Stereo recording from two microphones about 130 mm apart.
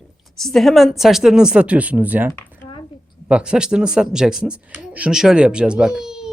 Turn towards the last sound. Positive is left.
turn(degrees=-5)  # may be behind; listen again after turning